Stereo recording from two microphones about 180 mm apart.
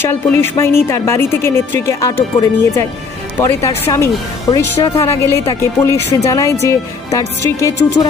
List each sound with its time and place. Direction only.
0.0 s speech: 10° left (ahead or behind)